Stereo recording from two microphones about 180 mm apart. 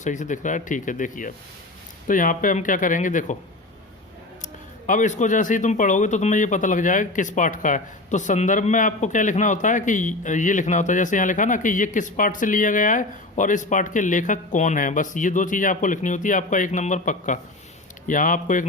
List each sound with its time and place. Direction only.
0.0 s speech: 45° left (ahead or behind)
4.9 s speech: 45° left (ahead or behind)